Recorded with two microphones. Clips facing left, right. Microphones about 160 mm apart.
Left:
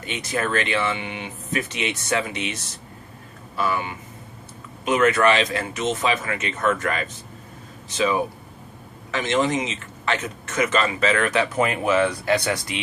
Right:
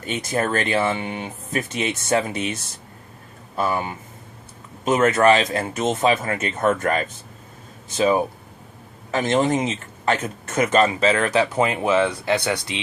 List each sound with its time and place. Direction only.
0.0 s speech: 45° right (ahead or behind)
3.6 s speech: 40° right (ahead or behind)